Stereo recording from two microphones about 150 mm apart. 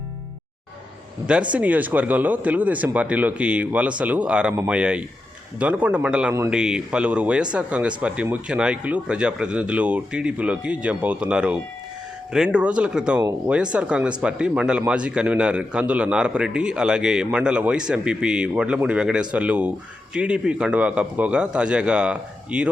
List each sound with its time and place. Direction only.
1.5 s a man's voice: 10° right (ahead or behind)